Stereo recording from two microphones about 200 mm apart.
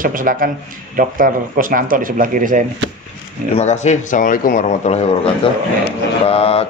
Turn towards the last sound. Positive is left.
turn(degrees=30)  # may be behind; listen again after turning